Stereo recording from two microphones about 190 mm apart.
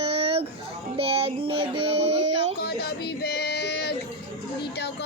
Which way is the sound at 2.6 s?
55° left (ahead or behind).